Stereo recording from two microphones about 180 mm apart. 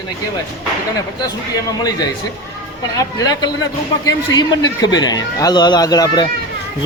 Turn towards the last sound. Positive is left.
turn(degrees=20)  # may be behind; listen again after turning